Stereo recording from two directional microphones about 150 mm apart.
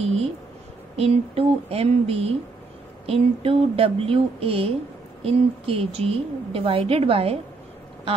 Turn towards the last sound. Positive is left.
turn(degrees=-40)  # may be behind; listen again after turning